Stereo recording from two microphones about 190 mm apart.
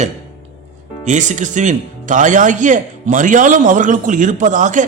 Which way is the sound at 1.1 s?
40° right (ahead or behind).